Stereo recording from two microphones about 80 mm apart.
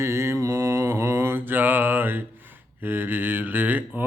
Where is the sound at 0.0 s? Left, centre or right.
Right.